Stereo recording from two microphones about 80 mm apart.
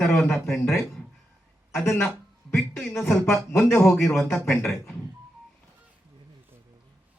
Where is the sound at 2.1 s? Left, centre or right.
Centre.